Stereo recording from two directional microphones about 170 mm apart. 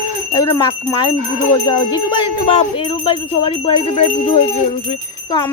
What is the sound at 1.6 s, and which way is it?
Jingle bell, 25° left (ahead or behind).